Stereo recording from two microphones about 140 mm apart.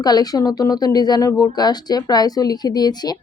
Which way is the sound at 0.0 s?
30° left (ahead or behind).